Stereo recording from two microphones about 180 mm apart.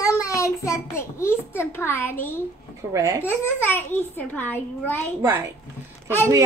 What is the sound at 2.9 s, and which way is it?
Speech, 15° right (ahead or behind).